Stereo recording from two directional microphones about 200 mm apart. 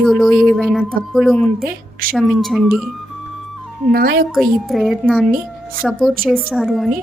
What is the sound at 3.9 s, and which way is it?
Speech, 50° right (ahead or behind).